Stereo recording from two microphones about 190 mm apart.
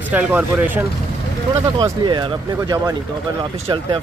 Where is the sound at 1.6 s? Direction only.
25° right (ahead or behind).